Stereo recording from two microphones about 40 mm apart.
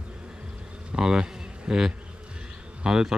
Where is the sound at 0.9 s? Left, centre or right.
Centre.